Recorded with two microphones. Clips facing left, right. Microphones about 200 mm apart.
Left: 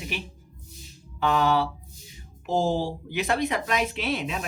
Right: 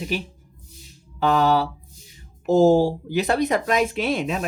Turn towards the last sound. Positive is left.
turn(degrees=-45)  # may be behind; listen again after turning